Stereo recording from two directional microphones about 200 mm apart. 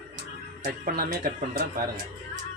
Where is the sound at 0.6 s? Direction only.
50° right (ahead or behind).